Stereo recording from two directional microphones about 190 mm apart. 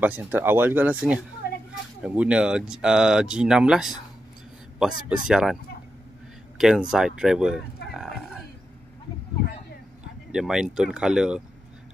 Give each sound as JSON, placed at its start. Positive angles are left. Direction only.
{"t": 0.0, "sound": "speech", "side_deg": -10}
{"t": 1.4, "sound": "a sound", "side_deg": 55}
{"t": 2.0, "sound": "speech", "side_deg": -5}
{"t": 5.1, "sound": "speech", "side_deg": -5}
{"t": 6.6, "sound": "speech", "side_deg": -5}
{"t": 10.3, "sound": "speech", "side_deg": -5}